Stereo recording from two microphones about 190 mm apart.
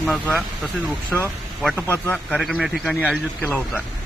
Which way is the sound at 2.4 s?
Centre (ahead or behind).